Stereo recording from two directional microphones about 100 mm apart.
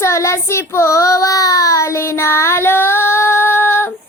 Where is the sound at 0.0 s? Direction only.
30° left (ahead or behind).